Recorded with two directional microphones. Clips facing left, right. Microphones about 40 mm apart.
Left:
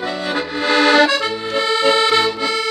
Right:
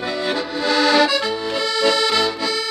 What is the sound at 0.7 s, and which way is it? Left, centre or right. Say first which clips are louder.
Accordion: left 3 dB; left.